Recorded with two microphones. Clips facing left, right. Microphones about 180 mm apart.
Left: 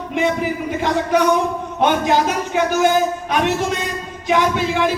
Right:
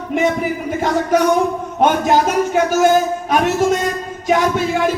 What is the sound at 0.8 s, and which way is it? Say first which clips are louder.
Music: right 2 dB; 45° right (ahead or behind).